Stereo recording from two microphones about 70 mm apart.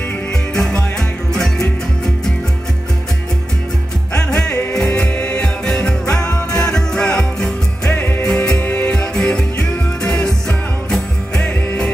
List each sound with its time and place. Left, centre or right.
0.6 s music: centre
4.1 s music: centre
11.4 s music: centre